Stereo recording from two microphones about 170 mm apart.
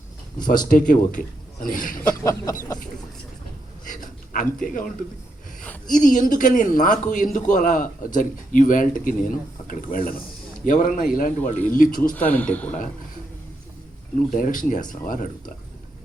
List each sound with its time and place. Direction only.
0.4 s a man's voice: 50° left (ahead or behind)
2.0 s a sound: 20° left (ahead or behind)
3.8 s a sound: 50° left (ahead or behind)
4.6 s a man's voice: 50° left (ahead or behind)
5.9 s a man's voice: 50° left (ahead or behind)
12.1 s speech: 10° left (ahead or behind)
14.3 s a man's voice: 50° left (ahead or behind)